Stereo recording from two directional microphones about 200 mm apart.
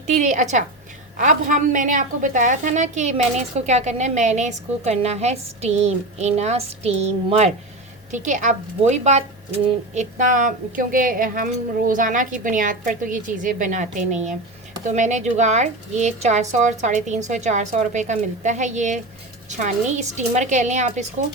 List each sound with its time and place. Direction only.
0.2 s a woman's voice: 35° right (ahead or behind)